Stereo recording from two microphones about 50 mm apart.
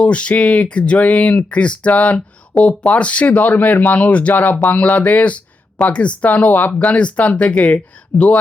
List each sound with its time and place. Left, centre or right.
0.0 s speech: left
8.1 s speech: left